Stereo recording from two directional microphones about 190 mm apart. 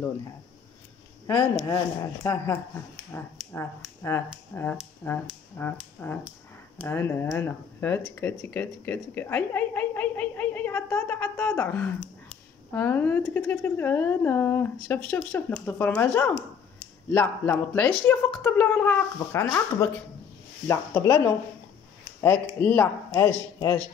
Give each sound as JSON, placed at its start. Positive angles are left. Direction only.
{"t": 1.7, "sound": "speech", "side_deg": 15}
{"t": 22.6, "sound": "speech", "side_deg": 10}